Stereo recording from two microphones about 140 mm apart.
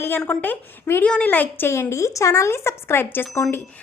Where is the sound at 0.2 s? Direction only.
15° left (ahead or behind).